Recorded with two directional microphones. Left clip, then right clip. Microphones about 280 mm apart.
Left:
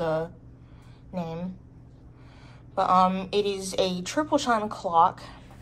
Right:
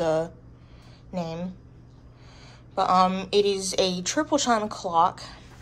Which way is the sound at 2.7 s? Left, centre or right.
Centre.